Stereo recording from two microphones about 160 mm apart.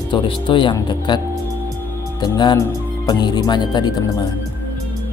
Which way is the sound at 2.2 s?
25° left (ahead or behind).